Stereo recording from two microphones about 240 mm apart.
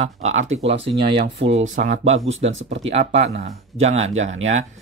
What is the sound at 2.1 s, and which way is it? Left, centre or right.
Speech, right.